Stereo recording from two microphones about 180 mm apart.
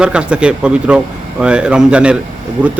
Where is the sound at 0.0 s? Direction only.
5° right (ahead or behind).